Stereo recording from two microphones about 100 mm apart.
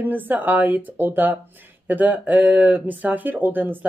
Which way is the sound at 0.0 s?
20° right (ahead or behind).